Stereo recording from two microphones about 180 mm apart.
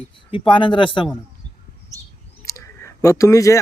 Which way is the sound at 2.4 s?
20° left (ahead or behind).